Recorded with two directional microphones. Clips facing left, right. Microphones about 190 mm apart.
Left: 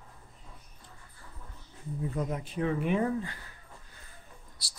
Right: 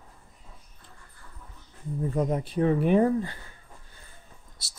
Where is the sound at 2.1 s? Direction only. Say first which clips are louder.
Right 9 dB; 35° right (ahead or behind).